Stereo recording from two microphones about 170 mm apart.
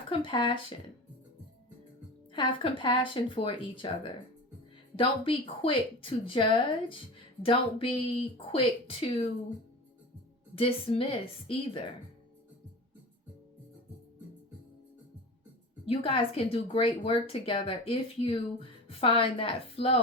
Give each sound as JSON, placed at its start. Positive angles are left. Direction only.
{"t": 0.1, "sound": "speech", "side_deg": 30}
{"t": 2.3, "sound": "a woman's voice", "side_deg": 30}
{"t": 10.5, "sound": "a woman's voice", "side_deg": 35}
{"t": 15.9, "sound": "a woman's voice", "side_deg": 30}